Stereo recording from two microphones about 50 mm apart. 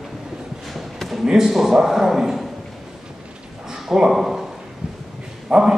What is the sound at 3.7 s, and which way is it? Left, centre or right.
Speech, centre.